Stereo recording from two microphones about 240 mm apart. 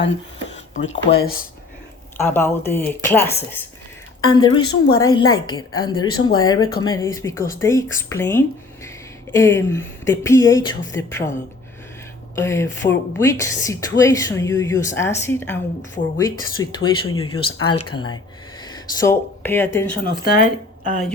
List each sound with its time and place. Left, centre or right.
0.5 s a sound: left
1.1 s speech: left
2.1 s a woman's voice: centre
12.4 s a woman's voice: centre
17.6 s speech: left
17.9 s a woman's voice: centre
20.1 s speech: left